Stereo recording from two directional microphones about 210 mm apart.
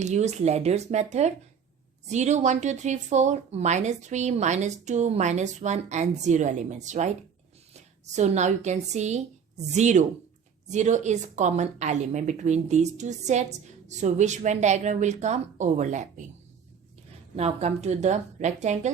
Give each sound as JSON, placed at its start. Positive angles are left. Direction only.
{"t": 0.0, "sound": "speech", "side_deg": -35}
{"t": 17.3, "sound": "speech", "side_deg": -30}